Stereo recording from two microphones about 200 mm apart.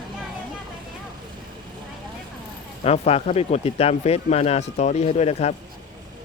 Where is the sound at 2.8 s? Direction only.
30° left (ahead or behind).